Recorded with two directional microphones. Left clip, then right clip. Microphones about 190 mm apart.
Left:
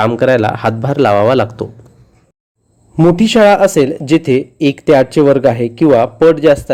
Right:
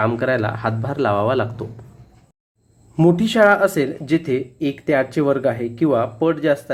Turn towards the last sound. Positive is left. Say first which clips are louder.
# left 10 dB
turn(degrees=30)  # may be behind; listen again after turning